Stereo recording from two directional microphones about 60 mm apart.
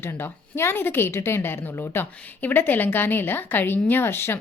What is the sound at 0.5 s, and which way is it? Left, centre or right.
A woman's voice, left.